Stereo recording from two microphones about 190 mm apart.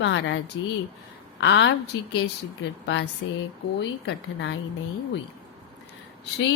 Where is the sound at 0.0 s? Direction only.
65° left (ahead or behind).